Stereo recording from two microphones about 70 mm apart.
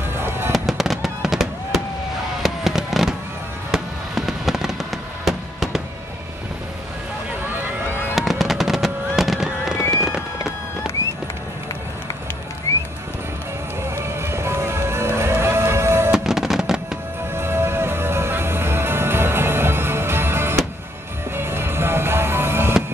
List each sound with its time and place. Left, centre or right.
0.1 s fireworks: right
0.5 s fireworks: centre
8.1 s fireworks: centre
13.8 s music: right
16.1 s music: centre
17.3 s music: right